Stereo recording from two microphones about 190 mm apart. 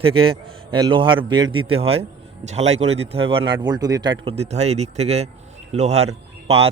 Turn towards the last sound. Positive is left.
turn(degrees=-35)  # may be behind; listen again after turning